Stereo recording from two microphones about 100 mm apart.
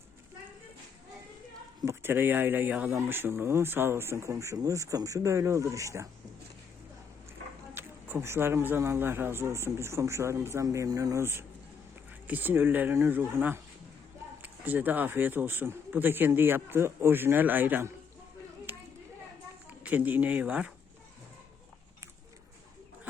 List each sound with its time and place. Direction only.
1.8 s speech: 25° right (ahead or behind)
7.7 s speech: 20° right (ahead or behind)
18.7 s a sound: 20° right (ahead or behind)
19.8 s speech: 15° right (ahead or behind)